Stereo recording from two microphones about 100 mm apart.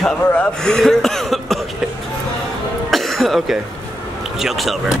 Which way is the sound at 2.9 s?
Centre (ahead or behind).